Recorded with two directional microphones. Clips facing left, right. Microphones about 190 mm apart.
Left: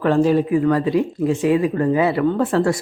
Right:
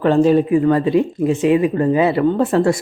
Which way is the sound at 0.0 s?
25° right (ahead or behind).